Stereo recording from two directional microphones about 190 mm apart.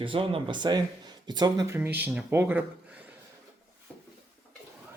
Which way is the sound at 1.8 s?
10° right (ahead or behind).